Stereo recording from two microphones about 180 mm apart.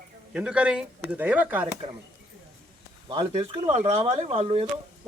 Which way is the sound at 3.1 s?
25° right (ahead or behind).